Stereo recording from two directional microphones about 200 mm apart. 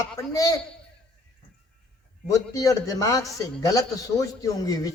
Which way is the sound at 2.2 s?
15° left (ahead or behind).